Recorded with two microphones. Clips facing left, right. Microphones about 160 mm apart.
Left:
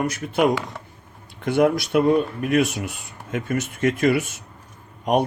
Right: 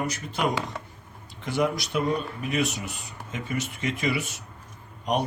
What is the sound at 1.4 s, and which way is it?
Speech, 55° left (ahead or behind).